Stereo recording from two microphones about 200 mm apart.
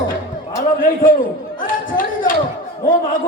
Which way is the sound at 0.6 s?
45° left (ahead or behind).